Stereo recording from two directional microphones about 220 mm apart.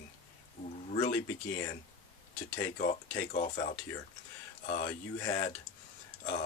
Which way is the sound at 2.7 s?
35° left (ahead or behind).